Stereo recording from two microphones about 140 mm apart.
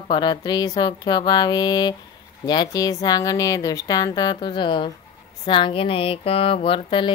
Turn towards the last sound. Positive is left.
turn(degrees=40)  # may be behind; listen again after turning